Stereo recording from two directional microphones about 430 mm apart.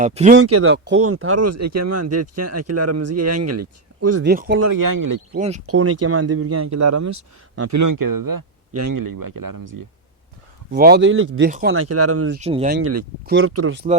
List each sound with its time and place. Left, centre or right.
0.0 s speech: centre
0.3 s speech: right
4.3 s speech: right
4.6 s speech: right
5.3 s speech: centre
5.6 s speech: right
10.7 s speech: right
12.4 s speech: centre
12.8 s speech: right